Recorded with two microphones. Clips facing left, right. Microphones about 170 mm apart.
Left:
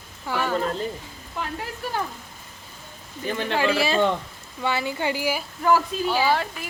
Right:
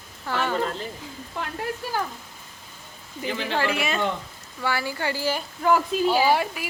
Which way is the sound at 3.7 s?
30° left (ahead or behind).